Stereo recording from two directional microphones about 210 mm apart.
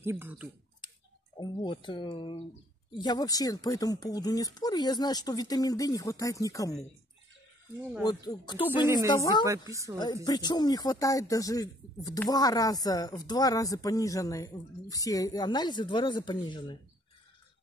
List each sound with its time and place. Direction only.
0.0 s speech: 10° right (ahead or behind)
1.4 s speech: 20° left (ahead or behind)
8.0 s speech: 20° left (ahead or behind)
8.8 s speech: 15° right (ahead or behind)
9.1 s speech: 15° left (ahead or behind)